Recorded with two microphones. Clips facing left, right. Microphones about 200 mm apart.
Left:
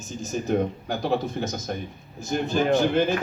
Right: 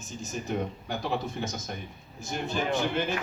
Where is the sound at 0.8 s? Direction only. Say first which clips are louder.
Left 6 dB; 40° left (ahead or behind).